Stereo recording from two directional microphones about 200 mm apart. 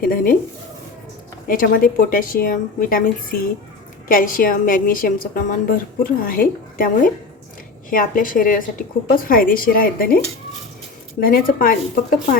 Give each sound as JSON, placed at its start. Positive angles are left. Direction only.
{"t": 0.0, "sound": "a woman's voice", "side_deg": 45}
{"t": 1.5, "sound": "a woman's voice", "side_deg": 45}
{"t": 4.1, "sound": "a woman's voice", "side_deg": 45}
{"t": 11.2, "sound": "a woman's voice", "side_deg": 45}